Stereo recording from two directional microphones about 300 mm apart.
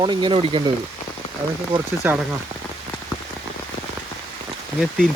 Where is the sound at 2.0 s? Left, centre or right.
Centre.